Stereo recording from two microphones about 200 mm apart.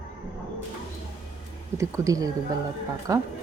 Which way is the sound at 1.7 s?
15° right (ahead or behind).